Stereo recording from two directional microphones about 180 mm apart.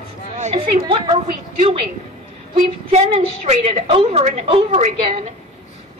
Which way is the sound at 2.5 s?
35° right (ahead or behind).